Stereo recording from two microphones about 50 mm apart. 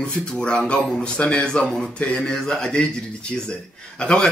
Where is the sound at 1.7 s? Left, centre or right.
Centre.